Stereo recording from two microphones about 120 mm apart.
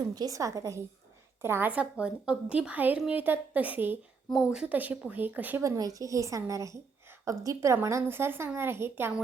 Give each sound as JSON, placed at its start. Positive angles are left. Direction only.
{"t": 0.1, "sound": "a woman's voice", "side_deg": -30}
{"t": 4.3, "sound": "a woman's voice", "side_deg": -5}
{"t": 5.6, "sound": "a woman's voice", "side_deg": -30}